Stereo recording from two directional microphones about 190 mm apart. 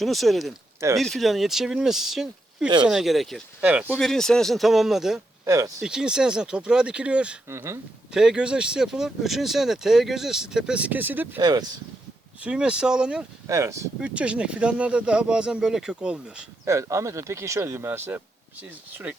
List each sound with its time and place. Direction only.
0.0 s speech: centre (ahead or behind)
3.8 s speech: 5° left (ahead or behind)
5.5 s speech: 15° right (ahead or behind)
5.8 s speech: 5° right (ahead or behind)
8.1 s speech: 5° right (ahead or behind)
11.3 s speech: 20° right (ahead or behind)
12.4 s speech: 5° right (ahead or behind)
13.5 s speech: 15° right (ahead or behind)
16.6 s speech: 15° right (ahead or behind)